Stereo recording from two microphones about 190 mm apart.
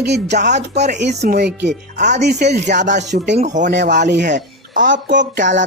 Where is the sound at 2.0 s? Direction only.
40° right (ahead or behind).